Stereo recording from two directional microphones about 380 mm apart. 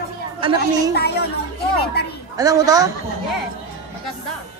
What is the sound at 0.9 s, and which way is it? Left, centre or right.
Child singing, left.